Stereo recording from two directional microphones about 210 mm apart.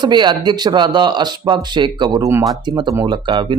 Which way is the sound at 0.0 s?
20° right (ahead or behind).